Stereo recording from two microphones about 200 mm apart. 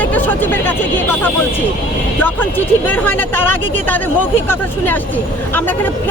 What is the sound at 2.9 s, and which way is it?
Speech, 10° left (ahead or behind).